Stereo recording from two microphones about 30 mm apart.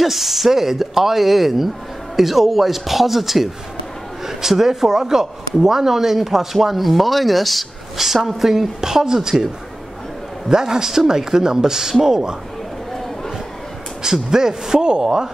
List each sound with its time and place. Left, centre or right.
0.0 s a man's voice: centre
10.5 s speech: centre
14.3 s speech: centre